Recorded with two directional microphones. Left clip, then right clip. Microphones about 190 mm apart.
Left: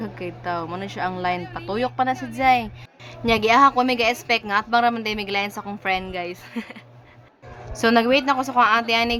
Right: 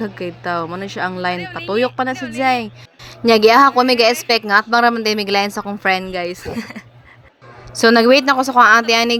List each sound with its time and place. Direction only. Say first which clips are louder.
0.0 s a woman's voice: right 6 dB; 25° right (ahead or behind)
2.1 s speech: right 7 dB; 5° right (ahead or behind)
2.4 s a woman's voice: right 1 dB; 25° right (ahead or behind)